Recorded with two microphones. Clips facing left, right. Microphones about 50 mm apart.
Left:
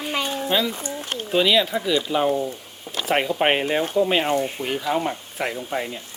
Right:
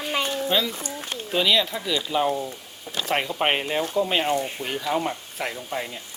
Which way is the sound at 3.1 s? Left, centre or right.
Centre.